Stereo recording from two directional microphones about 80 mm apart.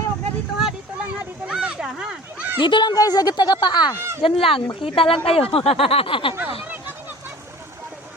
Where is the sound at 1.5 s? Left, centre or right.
Centre.